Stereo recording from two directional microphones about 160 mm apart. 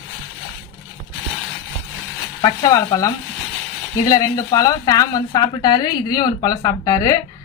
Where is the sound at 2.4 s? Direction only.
20° left (ahead or behind).